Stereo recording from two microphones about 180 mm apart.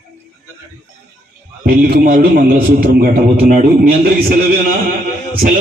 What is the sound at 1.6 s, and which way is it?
A man's voice, 55° right (ahead or behind).